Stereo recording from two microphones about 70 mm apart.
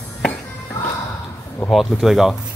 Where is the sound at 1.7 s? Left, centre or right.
Centre.